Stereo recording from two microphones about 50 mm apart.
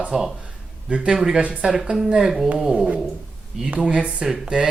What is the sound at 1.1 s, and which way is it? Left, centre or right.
Speech, centre.